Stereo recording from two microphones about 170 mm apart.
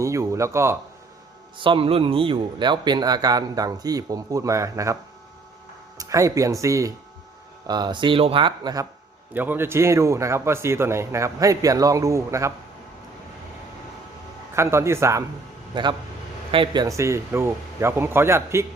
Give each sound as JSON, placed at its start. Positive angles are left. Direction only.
{"t": 0.0, "sound": "a man's voice", "side_deg": -15}
{"t": 1.5, "sound": "speech", "side_deg": -30}
{"t": 6.0, "sound": "speech", "side_deg": -20}
{"t": 9.3, "sound": "a man's voice", "side_deg": -10}
{"t": 14.5, "sound": "a man's voice", "side_deg": -15}
{"t": 15.7, "sound": "a man's voice", "side_deg": -25}